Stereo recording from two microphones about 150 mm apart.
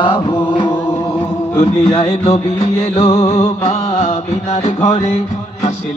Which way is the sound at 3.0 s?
45° left (ahead or behind).